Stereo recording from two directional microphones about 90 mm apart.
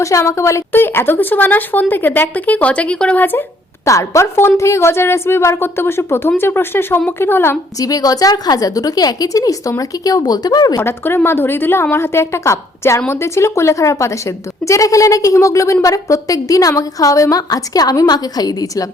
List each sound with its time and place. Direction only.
0.0 s a woman's voice: 35° left (ahead or behind); by 3.4 s 20° left (ahead or behind)
3.8 s a woman's voice: 35° left (ahead or behind)
7.8 s a woman's voice: 40° left (ahead or behind)
10.8 s a woman's voice: 25° left (ahead or behind); by 18.9 s 45° left (ahead or behind)